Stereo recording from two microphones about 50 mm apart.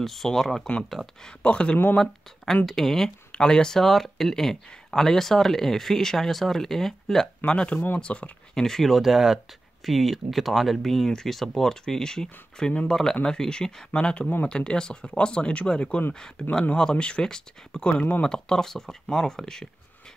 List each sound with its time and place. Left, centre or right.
0.0 s speech: centre
1.4 s speech: left
2.0 s speech: centre
3.3 s speech: centre
7.4 s speech: left
8.5 s speech: centre